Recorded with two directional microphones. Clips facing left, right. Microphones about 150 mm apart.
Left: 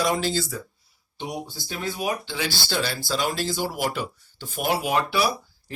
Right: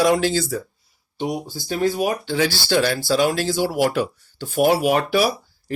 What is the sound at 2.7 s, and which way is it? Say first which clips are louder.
Speech: right 8 dB; 65° right (ahead or behind).